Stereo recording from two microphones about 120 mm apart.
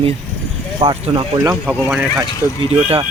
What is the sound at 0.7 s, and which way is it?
Speech, 45° right (ahead or behind).